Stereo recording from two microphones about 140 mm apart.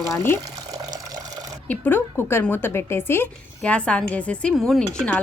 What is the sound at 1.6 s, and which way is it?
A woman's voice, 10° left (ahead or behind).